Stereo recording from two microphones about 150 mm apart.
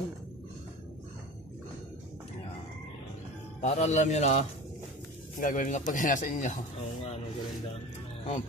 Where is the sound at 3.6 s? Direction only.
50° left (ahead or behind).